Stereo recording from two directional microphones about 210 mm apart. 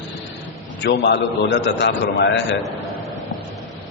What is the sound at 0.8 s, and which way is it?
A man's voice, 55° left (ahead or behind).